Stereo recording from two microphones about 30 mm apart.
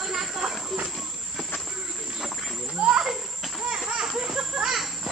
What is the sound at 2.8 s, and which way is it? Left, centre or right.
Children playing, right.